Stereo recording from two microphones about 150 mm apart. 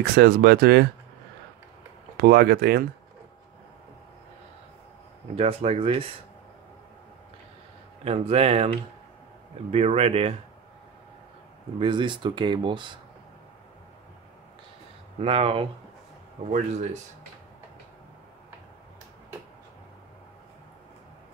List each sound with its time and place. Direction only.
0.0 s speech: 90° right
2.1 s speech: 90° right
5.3 s speech: 40° right (ahead or behind)
8.0 s speech: 40° right (ahead or behind)
9.7 s speech: 40° right (ahead or behind)
11.8 s speech: 30° right (ahead or behind)
15.1 s speech: 40° right (ahead or behind)
16.4 s speech: 50° right (ahead or behind)